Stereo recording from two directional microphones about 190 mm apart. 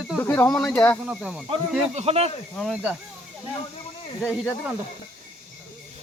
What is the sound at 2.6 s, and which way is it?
Speech, centre (ahead or behind).